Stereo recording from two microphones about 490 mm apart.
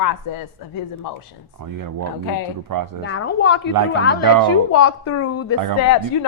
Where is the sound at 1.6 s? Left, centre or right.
Right.